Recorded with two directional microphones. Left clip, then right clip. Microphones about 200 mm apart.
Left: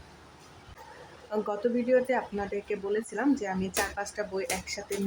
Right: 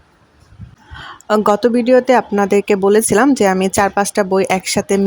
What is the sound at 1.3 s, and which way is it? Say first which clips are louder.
Speech: right 17 dB; 55° right (ahead or behind).